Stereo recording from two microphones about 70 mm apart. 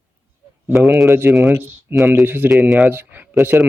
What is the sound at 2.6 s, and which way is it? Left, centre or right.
Speech, centre.